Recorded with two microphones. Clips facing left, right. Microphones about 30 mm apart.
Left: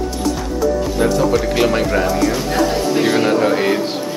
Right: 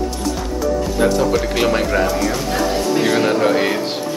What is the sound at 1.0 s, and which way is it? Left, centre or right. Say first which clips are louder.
Speech: left 1 dB; centre.